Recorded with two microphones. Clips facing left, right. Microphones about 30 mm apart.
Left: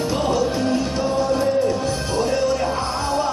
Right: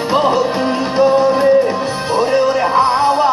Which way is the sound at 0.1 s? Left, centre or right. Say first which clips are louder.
Right 9 dB; right.